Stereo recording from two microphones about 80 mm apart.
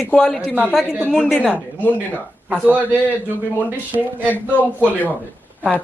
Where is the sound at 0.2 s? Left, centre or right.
Centre.